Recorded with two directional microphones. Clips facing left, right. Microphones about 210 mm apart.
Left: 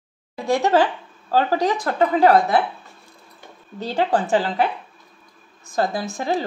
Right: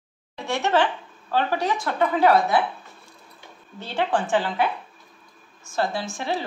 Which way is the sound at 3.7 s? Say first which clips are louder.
Left 4 dB; 40° left (ahead or behind).